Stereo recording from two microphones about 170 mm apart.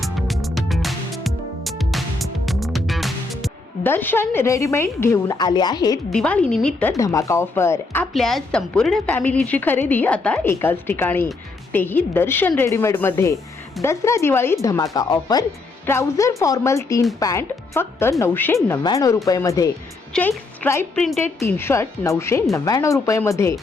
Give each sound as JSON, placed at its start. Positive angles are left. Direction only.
{"t": 0.0, "sound": "music", "side_deg": 0}
{"t": 3.8, "sound": "a woman's voice", "side_deg": 10}
{"t": 6.1, "sound": "a woman's voice", "side_deg": 5}
{"t": 6.9, "sound": "a woman's voice", "side_deg": 20}
{"t": 8.1, "sound": "a woman's voice", "side_deg": 0}
{"t": 21.4, "sound": "a woman's voice", "side_deg": 15}